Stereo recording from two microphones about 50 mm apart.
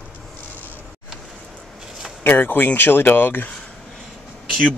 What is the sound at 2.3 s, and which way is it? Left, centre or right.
Speech, left.